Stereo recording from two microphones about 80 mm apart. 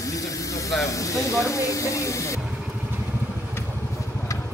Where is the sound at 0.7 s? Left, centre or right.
Left.